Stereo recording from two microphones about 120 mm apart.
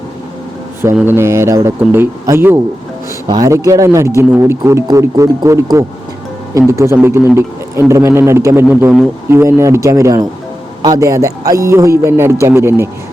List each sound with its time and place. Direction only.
1.0 s speech: 20° right (ahead or behind)